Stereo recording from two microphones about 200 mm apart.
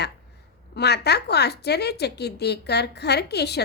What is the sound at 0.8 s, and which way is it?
Speech, 55° left (ahead or behind).